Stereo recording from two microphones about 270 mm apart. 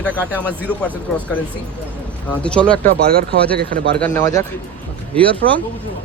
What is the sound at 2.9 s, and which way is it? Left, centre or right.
Speech, right.